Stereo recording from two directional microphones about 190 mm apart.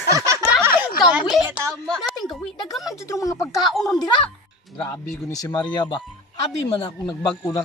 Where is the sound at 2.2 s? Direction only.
20° left (ahead or behind).